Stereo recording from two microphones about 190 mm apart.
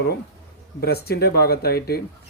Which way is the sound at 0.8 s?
55° left (ahead or behind).